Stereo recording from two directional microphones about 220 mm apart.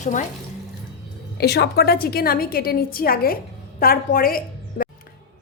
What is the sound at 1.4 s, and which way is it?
A woman's voice, 45° left (ahead or behind).